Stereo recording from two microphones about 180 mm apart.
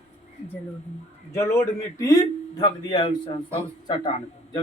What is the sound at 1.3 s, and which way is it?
Speech, 15° left (ahead or behind).